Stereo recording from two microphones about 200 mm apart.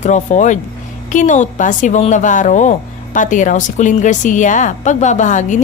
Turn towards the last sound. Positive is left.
turn(degrees=35)  # may be behind; listen again after turning